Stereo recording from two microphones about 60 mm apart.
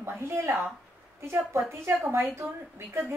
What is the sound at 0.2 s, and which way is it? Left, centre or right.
A woman's voice, right.